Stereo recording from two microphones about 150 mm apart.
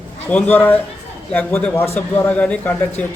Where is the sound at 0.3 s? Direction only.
10° left (ahead or behind).